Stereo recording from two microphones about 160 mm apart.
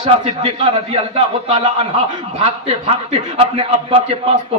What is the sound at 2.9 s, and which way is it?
Speech, 35° right (ahead or behind).